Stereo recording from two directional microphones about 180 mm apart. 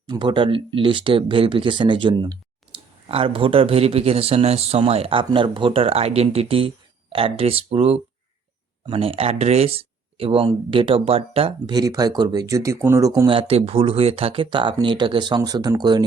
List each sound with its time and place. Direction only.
0.1 s speech: 25° right (ahead or behind)